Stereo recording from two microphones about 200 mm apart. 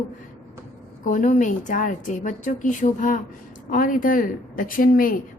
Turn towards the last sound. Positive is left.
turn(degrees=45)  # may be behind; listen again after turning